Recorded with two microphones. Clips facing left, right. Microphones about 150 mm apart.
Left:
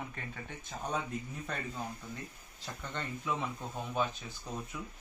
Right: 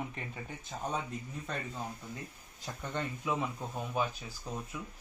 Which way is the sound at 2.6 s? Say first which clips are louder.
Right 3 dB; 15° right (ahead or behind).